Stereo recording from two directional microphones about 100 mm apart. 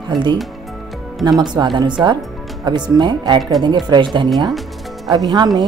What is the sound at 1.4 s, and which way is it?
A woman's voice, 45° right (ahead or behind).